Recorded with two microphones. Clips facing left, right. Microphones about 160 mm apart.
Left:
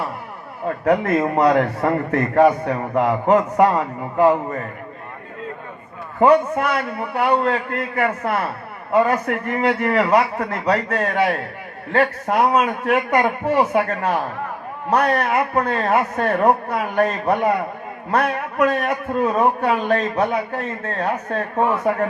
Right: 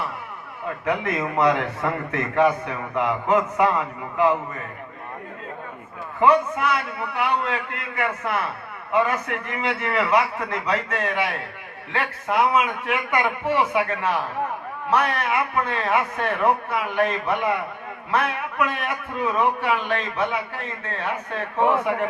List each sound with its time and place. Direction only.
0.6 s a man's voice: 35° left (ahead or behind)
6.1 s a man's voice: 40° left (ahead or behind)